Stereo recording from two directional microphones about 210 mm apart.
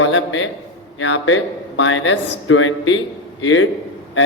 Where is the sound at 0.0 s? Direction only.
65° left (ahead or behind).